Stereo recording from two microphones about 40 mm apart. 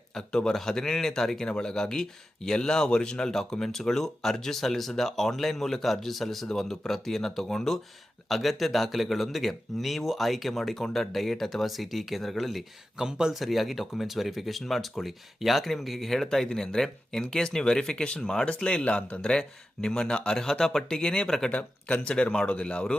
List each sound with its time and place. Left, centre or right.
0.1 s a man's voice: centre
8.3 s speech: centre
10.8 s speech: centre
13.0 s speech: centre
13.3 s speech: centre; by 19.2 s left
19.2 s speech: centre
21.5 s speech: left
22.1 s speech: left